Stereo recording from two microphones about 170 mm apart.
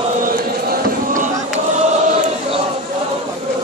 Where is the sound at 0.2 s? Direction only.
55° right (ahead or behind).